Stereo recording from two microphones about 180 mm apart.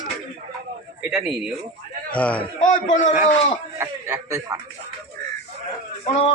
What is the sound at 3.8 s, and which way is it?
Speech, 15° right (ahead or behind).